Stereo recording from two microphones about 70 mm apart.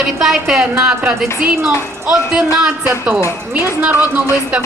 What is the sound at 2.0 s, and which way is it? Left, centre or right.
Speech, centre.